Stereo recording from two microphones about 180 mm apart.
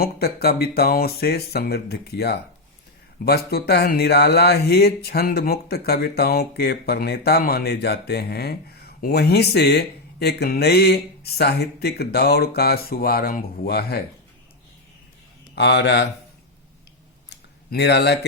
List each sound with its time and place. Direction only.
0.0 s speech: 60° left (ahead or behind)
15.5 s a man's voice: 70° left (ahead or behind)
17.2 s a sound: 65° left (ahead or behind)